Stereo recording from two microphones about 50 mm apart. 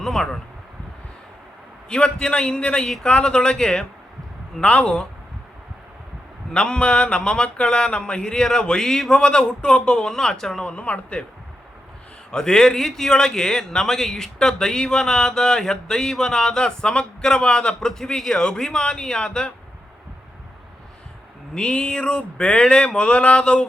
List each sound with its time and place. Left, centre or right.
0.0 s speech: centre
1.9 s a man's voice: centre
2.8 s speech: centre
3.1 s a man's voice: centre
4.6 s a sound: left
6.5 s a man's voice: centre
10.7 s a sound: left
12.3 s a man's voice: centre
21.5 s a sound: centre